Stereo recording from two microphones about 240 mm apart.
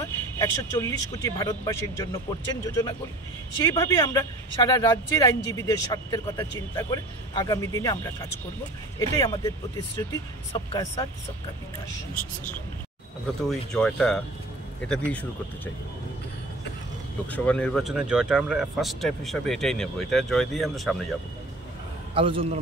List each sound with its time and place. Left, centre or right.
0.4 s speech: centre
10.5 s speech: centre
13.4 s speech: centre
17.3 s speech: centre
22.1 s a man's voice: right